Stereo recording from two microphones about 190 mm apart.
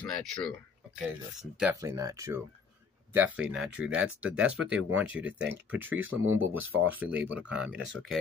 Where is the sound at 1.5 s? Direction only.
10° right (ahead or behind).